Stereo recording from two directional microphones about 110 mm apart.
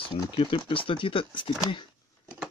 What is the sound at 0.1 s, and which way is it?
Speech, 55° left (ahead or behind).